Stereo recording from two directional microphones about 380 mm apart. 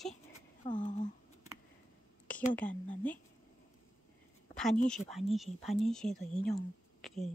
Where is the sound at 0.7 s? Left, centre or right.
Centre.